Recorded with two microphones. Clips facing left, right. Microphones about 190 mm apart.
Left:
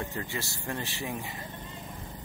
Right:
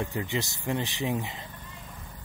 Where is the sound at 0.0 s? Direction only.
15° right (ahead or behind).